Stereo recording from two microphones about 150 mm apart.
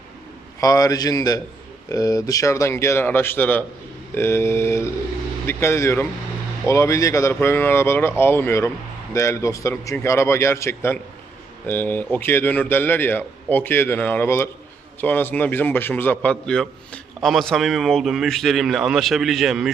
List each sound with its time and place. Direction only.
0.6 s a man's voice: 25° left (ahead or behind); by 19.7 s centre (ahead or behind)